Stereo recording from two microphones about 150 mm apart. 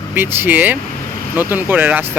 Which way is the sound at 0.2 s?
15° right (ahead or behind).